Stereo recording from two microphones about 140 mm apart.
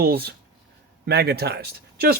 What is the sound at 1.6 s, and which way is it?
Speech, 90° right.